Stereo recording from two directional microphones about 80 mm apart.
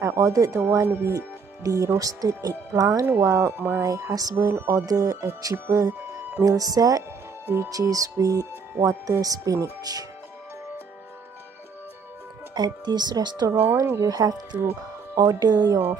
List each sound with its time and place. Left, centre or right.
0.0 s speech: right
1.1 s speech: right
3.8 s speech: right
7.4 s speech: right
7.7 s speech: right
12.5 s speech: right
14.0 s speech: right
14.6 s speech: right
15.2 s speech: right